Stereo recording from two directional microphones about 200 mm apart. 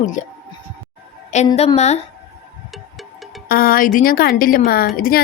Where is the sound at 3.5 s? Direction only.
50° left (ahead or behind).